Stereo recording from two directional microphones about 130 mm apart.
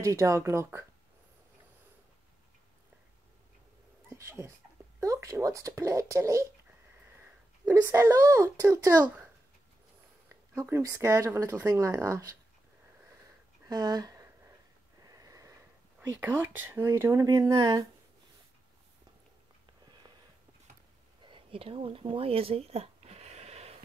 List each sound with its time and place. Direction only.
0.0 s speech: 20° right (ahead or behind)
4.1 s a child's voice: 20° right (ahead or behind)
10.5 s speech: 25° right (ahead or behind)
13.7 s a sound: 30° right (ahead or behind)
15.0 s wheeze: 25° right (ahead or behind)
16.0 s speech: 15° right (ahead or behind)
21.2 s a sound: 40° right (ahead or behind)